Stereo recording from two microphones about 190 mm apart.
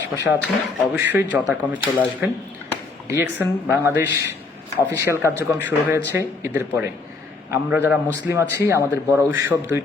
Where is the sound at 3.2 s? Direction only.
10° right (ahead or behind).